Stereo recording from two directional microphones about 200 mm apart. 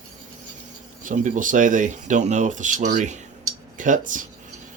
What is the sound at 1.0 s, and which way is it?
Speech, 40° right (ahead or behind).